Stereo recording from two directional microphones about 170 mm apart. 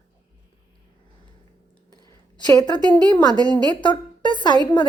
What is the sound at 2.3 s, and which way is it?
A woman's voice, 25° left (ahead or behind).